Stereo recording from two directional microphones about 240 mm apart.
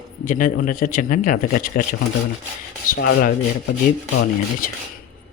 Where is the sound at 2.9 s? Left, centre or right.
Left.